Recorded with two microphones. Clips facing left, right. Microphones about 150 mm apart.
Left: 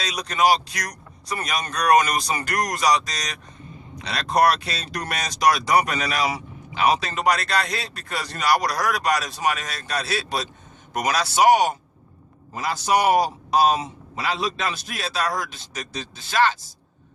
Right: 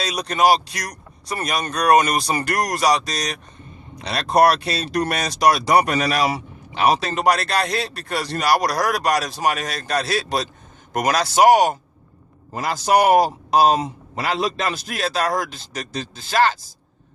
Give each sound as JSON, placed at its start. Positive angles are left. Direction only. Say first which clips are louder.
{"t": 0.0, "sound": "a man's voice", "louder": "right 3 dB", "side_deg": -30}